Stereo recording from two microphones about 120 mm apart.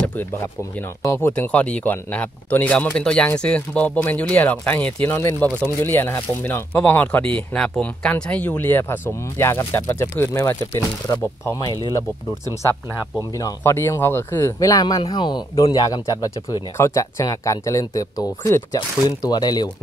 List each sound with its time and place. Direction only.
0.0 s a sound: 15° left (ahead or behind)
1.0 s speech: 25° left (ahead or behind)
1.3 s speech: 10° left (ahead or behind); by 11.2 s 30° left (ahead or behind)
13.4 s speech: 25° left (ahead or behind)